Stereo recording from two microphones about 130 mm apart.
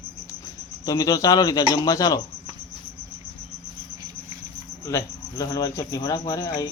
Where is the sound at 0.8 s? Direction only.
30° left (ahead or behind).